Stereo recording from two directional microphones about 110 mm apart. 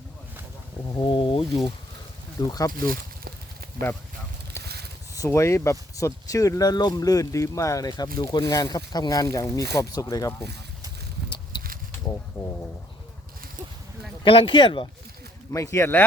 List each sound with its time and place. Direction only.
0.9 s speech: 40° left (ahead or behind)
2.4 s speech: 35° left (ahead or behind)
4.6 s a sound: 25° left (ahead or behind)
5.1 s speech: 30° left (ahead or behind)
14.3 s speech: 55° left (ahead or behind)
15.5 s speech: 25° left (ahead or behind)